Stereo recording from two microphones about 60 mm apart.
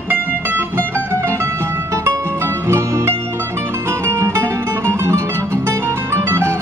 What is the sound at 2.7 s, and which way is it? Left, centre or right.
Music, right.